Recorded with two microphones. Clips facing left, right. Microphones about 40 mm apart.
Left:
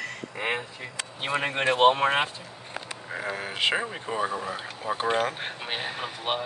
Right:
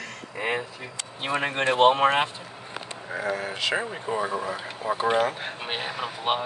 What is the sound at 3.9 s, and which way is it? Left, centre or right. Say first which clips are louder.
Speech: right 2 dB; centre.